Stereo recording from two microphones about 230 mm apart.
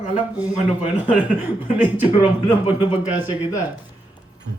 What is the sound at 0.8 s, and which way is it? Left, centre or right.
Speech, centre.